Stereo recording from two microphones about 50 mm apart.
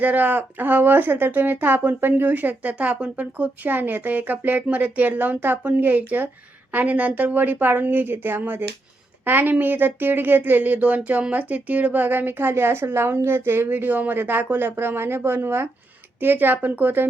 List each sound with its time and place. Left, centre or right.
0.0 s speech: right
3.7 s speech: right
16.2 s speech: right